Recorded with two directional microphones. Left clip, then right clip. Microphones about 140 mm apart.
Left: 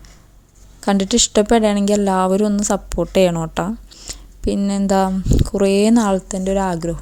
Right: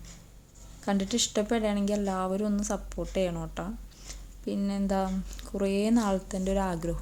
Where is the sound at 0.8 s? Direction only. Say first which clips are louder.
Left 12 dB; 60° left (ahead or behind).